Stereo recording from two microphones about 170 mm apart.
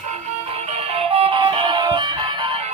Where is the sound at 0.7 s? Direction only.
35° right (ahead or behind).